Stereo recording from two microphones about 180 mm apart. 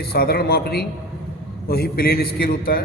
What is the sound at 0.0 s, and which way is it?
A man's voice, 60° left (ahead or behind).